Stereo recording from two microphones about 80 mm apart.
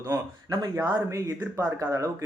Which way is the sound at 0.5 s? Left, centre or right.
Right.